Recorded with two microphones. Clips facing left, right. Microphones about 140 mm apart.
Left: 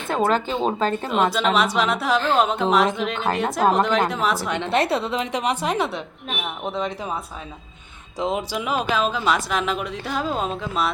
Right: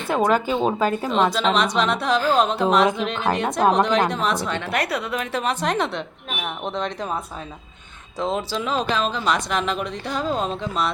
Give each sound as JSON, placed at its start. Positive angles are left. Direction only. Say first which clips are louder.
{"t": 0.2, "sound": "speech", "louder": "right 1 dB", "side_deg": -10}
{"t": 1.1, "sound": "speech", "louder": "left 1 dB", "side_deg": 5}
{"t": 4.4, "sound": "a woman's voice", "louder": "left 1 dB", "side_deg": 15}
{"t": 4.7, "sound": "a woman's voice", "louder": "left 5 dB", "side_deg": 25}
{"t": 8.2, "sound": "speech", "louder": "even", "side_deg": 15}